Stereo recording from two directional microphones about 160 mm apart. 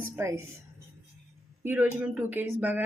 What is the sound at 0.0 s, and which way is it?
Speech, 15° right (ahead or behind).